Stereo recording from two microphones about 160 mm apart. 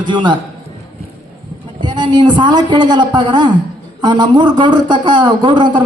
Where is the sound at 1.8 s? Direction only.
30° right (ahead or behind).